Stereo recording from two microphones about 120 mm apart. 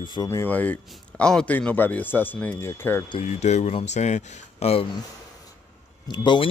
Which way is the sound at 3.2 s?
70° left (ahead or behind).